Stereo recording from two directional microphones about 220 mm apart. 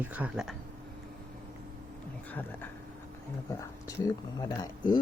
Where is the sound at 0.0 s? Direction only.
5° right (ahead or behind).